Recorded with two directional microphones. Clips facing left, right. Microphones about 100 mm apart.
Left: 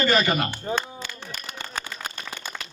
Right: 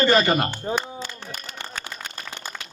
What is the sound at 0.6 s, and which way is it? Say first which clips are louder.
Speech: right 1 dB; 25° right (ahead or behind).